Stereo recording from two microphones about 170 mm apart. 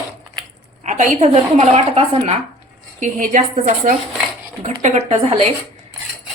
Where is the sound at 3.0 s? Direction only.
45° right (ahead or behind).